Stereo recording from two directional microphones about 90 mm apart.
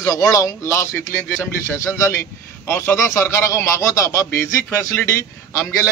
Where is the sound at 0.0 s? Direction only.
35° left (ahead or behind).